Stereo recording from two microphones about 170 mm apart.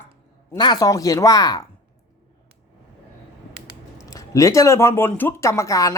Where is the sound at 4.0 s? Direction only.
20° left (ahead or behind).